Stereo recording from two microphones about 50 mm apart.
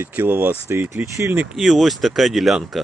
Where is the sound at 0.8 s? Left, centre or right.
Right.